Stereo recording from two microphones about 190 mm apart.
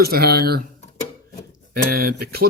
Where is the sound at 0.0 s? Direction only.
55° right (ahead or behind).